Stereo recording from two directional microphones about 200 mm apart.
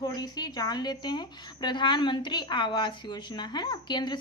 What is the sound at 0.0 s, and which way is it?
A woman's voice, 20° left (ahead or behind).